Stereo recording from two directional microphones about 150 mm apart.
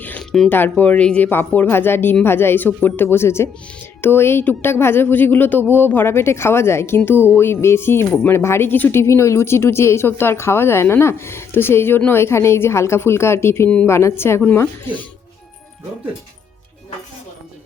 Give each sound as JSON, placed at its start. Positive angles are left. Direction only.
{"t": 0.0, "sound": "speech", "side_deg": 10}